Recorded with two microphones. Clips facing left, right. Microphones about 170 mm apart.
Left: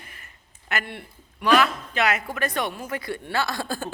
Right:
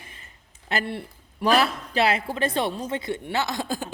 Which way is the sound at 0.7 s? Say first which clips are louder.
Right 3 dB; 30° right (ahead or behind).